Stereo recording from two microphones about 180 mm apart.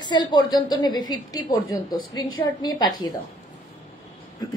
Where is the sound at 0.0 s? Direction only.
25° left (ahead or behind).